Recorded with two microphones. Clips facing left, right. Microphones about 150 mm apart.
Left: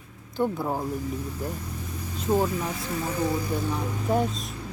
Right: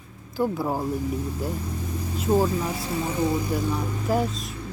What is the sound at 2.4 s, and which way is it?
Speech, 30° right (ahead or behind).